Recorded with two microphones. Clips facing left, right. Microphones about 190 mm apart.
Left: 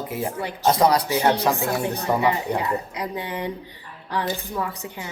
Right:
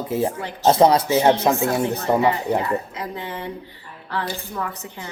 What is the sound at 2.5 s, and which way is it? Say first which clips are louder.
A woman's voice: right 2 dB; 15° left (ahead or behind).